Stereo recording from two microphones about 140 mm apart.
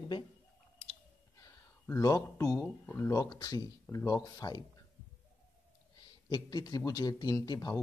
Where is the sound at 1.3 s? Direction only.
25° left (ahead or behind).